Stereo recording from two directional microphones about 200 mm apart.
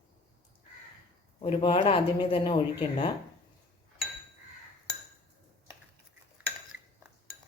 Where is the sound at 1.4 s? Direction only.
25° left (ahead or behind).